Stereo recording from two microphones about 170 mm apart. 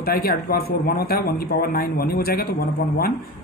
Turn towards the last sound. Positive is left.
turn(degrees=60)  # may be behind; listen again after turning